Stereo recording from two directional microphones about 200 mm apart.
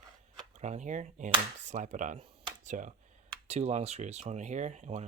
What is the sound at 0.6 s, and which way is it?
Speech, 35° right (ahead or behind).